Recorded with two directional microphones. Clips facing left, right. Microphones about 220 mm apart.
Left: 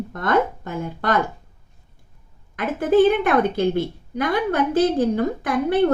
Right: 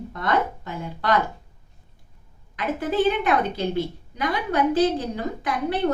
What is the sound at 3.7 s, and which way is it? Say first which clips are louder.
A woman's voice: left 4 dB; 50° left (ahead or behind).